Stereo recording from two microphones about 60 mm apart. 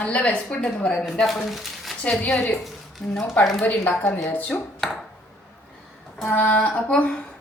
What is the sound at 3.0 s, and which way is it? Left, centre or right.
Speech, centre.